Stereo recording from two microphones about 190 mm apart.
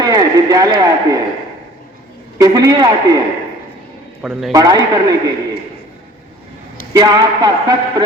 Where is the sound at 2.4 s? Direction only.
20° right (ahead or behind).